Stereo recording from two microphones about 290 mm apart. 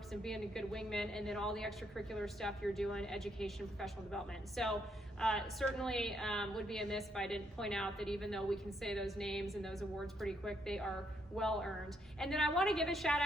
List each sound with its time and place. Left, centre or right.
0.1 s a woman's voice: centre